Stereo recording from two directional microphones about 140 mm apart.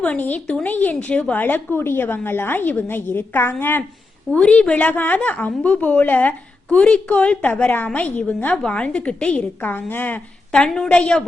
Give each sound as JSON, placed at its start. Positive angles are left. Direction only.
{"t": 0.0, "sound": "a woman's voice", "side_deg": 10}